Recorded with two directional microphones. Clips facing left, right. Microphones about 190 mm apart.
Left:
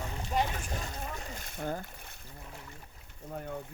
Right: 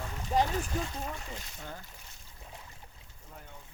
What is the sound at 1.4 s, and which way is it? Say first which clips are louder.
Speech: left 9 dB; 50° left (ahead or behind).